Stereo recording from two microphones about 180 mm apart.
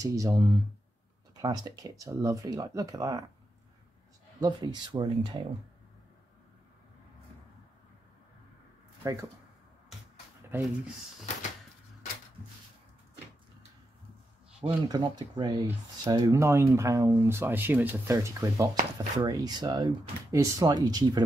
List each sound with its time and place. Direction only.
0.0 s speech: 20° right (ahead or behind)
4.4 s speech: 20° right (ahead or behind)
9.0 s speech: 15° right (ahead or behind)
14.6 s speech: 25° right (ahead or behind)